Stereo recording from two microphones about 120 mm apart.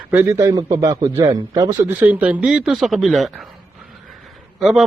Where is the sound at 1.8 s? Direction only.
15° right (ahead or behind).